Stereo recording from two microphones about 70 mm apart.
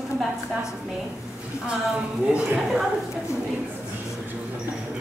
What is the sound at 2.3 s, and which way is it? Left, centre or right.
Speech, centre.